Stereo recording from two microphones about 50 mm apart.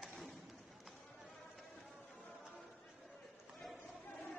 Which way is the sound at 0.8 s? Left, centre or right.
Centre.